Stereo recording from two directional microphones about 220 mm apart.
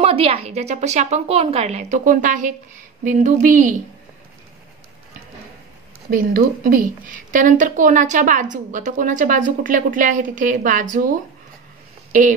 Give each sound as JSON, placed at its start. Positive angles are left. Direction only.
{"t": 0.0, "sound": "a woman's voice", "side_deg": -25}
{"t": 6.0, "sound": "a woman's voice", "side_deg": -40}